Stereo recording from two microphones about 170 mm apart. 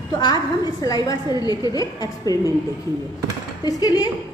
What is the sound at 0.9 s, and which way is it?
A woman's voice, 20° left (ahead or behind).